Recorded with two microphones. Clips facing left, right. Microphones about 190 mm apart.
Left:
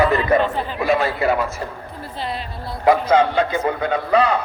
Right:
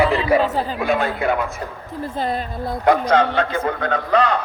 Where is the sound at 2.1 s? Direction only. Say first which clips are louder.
Right 4 dB; 45° right (ahead or behind).